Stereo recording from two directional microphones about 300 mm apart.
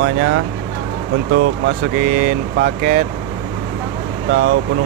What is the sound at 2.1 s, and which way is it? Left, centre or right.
Speech, right.